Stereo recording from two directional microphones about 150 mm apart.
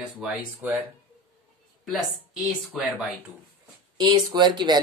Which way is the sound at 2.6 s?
5° left (ahead or behind).